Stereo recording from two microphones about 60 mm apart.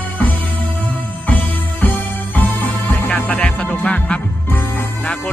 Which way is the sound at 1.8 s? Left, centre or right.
Left.